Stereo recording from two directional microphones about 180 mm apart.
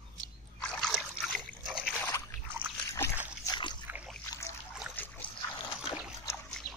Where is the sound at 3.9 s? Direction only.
5° right (ahead or behind).